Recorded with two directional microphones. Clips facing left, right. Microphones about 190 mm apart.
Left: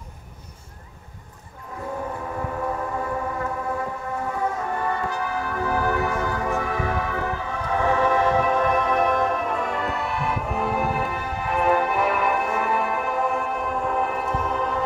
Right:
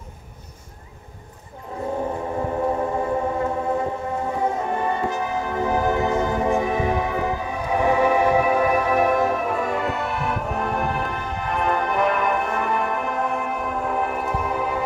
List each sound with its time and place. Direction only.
2.4 s music: 30° right (ahead or behind); by 14.8 s 10° right (ahead or behind)